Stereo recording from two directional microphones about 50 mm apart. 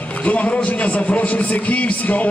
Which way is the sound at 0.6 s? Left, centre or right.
Left.